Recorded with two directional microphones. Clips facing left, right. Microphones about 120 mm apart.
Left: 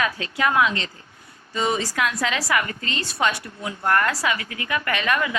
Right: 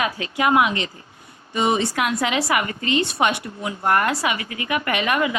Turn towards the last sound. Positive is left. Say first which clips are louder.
# right 2 dB
turn(degrees=-20)  # may be behind; listen again after turning